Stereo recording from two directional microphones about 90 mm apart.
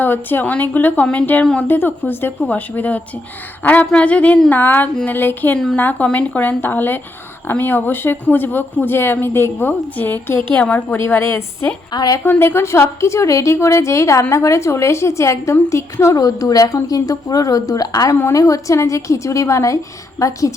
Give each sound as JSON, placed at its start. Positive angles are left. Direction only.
{"t": 0.0, "sound": "speech", "side_deg": 20}
{"t": 11.9, "sound": "a woman's voice", "side_deg": 50}
{"t": 12.2, "sound": "a woman's voice", "side_deg": 25}
{"t": 16.1, "sound": "a woman's voice", "side_deg": 40}